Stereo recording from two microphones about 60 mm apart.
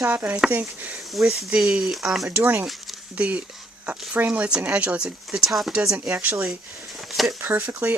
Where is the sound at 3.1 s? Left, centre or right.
Right.